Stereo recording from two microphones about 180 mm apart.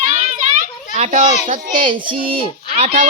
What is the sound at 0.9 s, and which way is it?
Speech, 40° right (ahead or behind).